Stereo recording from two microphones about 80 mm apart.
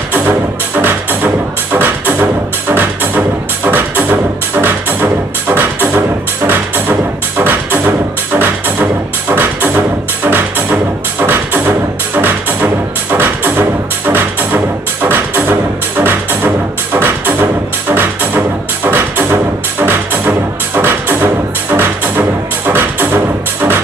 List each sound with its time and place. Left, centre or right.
0.7 s music: right